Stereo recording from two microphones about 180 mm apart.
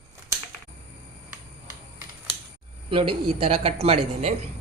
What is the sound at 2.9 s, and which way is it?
Speech, 30° right (ahead or behind).